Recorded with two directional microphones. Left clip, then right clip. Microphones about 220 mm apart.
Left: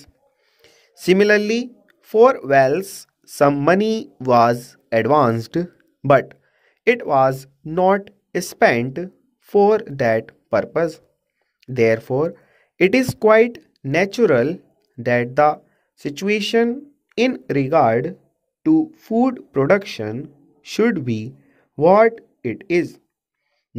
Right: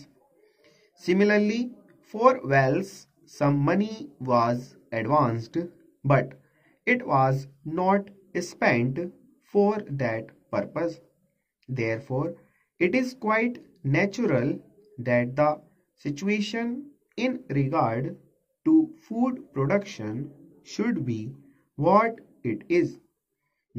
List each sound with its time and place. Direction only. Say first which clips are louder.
0.6 s speech: left 10 dB; 50° left (ahead or behind)